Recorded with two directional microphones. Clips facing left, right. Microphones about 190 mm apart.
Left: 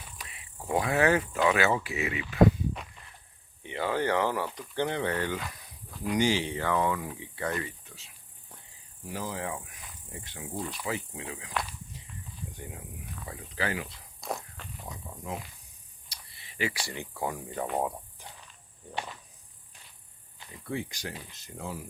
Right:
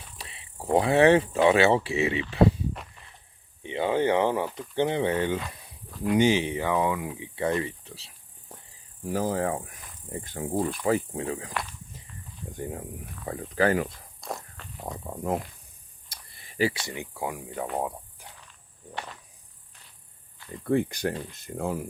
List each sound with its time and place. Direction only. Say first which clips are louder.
0.2 s speech: right 7 dB; 30° right (ahead or behind)
3.6 s speech: right 5 dB; 20° right (ahead or behind); by 14.0 s 50° right (ahead or behind)
14.2 s walk: left 1 dB; centre (ahead or behind)
14.8 s speech: right 9 dB; 55° right (ahead or behind)
16.0 s a sound: right 2 dB; 50° right (ahead or behind)
16.7 s speech: right 2 dB; 20° right (ahead or behind); by 18.3 s centre (ahead or behind)
20.7 s speech: right 10 dB; 55° right (ahead or behind)